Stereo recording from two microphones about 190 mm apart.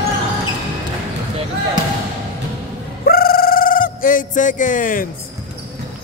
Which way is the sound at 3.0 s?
50° left (ahead or behind).